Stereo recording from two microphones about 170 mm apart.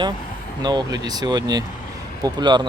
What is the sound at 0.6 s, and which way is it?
Speech, 25° right (ahead or behind).